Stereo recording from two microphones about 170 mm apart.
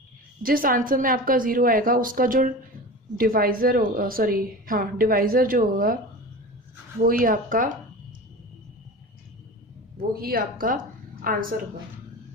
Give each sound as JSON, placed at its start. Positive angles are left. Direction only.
{"t": 0.4, "sound": "a woman's voice", "side_deg": -55}
{"t": 7.0, "sound": "a woman's voice", "side_deg": -55}
{"t": 10.2, "sound": "a woman's voice", "side_deg": -60}